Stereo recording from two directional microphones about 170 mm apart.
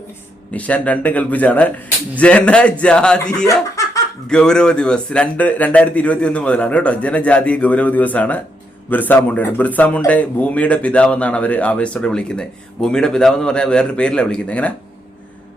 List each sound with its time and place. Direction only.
0.5 s speech: 10° left (ahead or behind)
3.5 s snicker: 20° left (ahead or behind)
4.3 s speech: 5° left (ahead or behind)